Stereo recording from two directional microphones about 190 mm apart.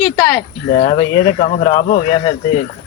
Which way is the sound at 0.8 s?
30° left (ahead or behind).